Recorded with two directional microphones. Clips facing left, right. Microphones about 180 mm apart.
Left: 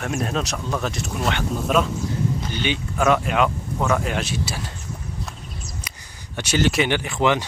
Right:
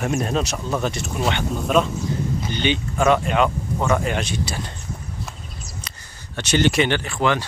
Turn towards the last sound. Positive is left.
turn(degrees=15)  # may be behind; listen again after turning